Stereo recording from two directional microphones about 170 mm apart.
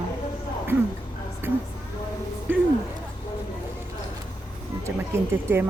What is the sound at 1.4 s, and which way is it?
Speech, 15° right (ahead or behind).